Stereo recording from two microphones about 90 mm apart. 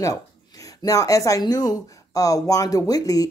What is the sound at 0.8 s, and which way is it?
Speech, 40° left (ahead or behind).